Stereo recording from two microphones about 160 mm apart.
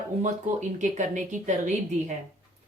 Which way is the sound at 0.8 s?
50° right (ahead or behind).